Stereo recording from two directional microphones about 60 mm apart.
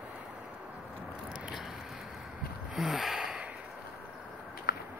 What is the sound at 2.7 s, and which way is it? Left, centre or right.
Gasp, centre.